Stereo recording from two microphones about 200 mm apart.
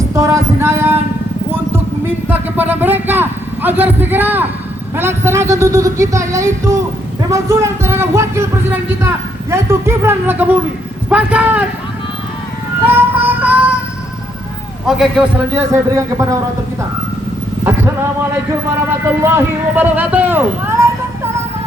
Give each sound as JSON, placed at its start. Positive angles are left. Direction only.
{"t": 0.1, "sound": "music", "side_deg": -15}
{"t": 1.7, "sound": "a man's voice", "side_deg": -10}
{"t": 12.8, "sound": "music", "side_deg": -10}
{"t": 14.8, "sound": "a man's voice", "side_deg": 0}
{"t": 16.0, "sound": "speech", "side_deg": -15}
{"t": 17.7, "sound": "speech", "side_deg": -10}